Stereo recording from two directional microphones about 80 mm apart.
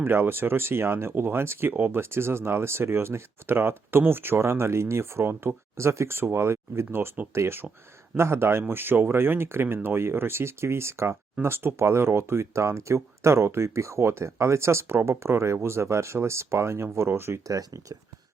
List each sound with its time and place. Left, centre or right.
0.0 s speech: right
17.4 s speech: right